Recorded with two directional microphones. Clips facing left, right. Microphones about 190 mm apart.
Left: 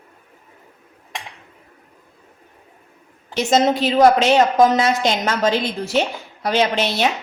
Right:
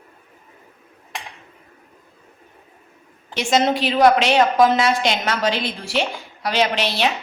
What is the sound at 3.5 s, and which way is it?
A woman's voice, 45° left (ahead or behind).